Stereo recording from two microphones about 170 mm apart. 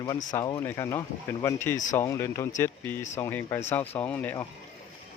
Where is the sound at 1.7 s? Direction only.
50° left (ahead or behind).